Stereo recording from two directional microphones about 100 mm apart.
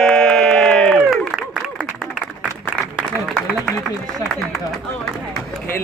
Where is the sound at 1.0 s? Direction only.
5° right (ahead or behind).